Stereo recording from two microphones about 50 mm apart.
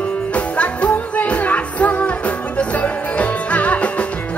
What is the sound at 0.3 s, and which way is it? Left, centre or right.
Music, left.